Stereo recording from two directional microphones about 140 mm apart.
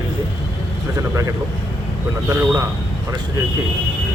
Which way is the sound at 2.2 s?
25° right (ahead or behind).